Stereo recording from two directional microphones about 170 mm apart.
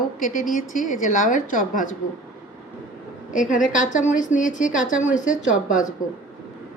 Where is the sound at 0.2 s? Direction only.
50° left (ahead or behind).